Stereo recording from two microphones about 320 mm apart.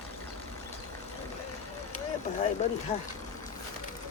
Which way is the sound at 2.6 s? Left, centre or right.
Left.